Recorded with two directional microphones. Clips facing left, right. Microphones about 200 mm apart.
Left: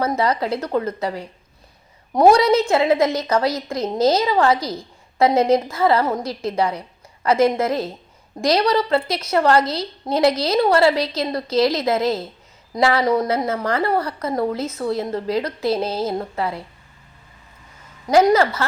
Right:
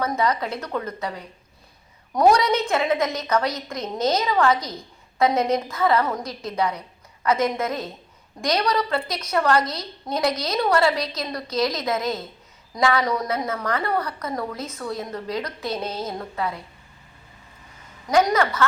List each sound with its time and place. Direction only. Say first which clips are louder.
0.0 s a woman's voice: left 3 dB; 30° left (ahead or behind)
18.1 s a woman's voice: left 5 dB; 30° left (ahead or behind)